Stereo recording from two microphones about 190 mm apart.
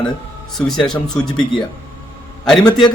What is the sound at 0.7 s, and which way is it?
A man's voice, 5° left (ahead or behind).